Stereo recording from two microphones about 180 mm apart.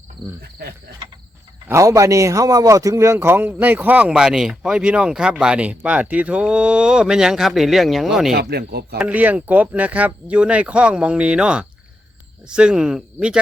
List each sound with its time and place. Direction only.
1.6 s a man's voice: 15° right (ahead or behind)
8.3 s speech: 60° right (ahead or behind)
9.0 s a man's voice: 10° right (ahead or behind)